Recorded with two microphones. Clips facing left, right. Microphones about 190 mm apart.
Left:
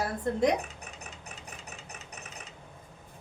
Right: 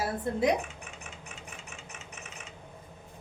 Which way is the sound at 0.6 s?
35° left (ahead or behind).